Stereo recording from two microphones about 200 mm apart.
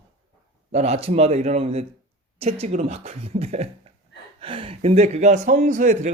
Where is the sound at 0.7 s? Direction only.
30° right (ahead or behind).